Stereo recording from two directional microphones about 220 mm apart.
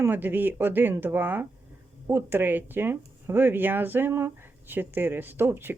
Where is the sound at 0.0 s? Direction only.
10° right (ahead or behind).